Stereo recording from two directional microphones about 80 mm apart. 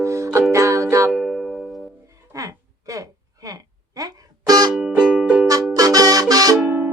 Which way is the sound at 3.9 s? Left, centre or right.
Right.